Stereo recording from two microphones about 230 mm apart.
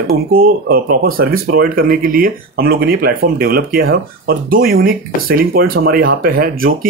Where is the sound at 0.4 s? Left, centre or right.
Right.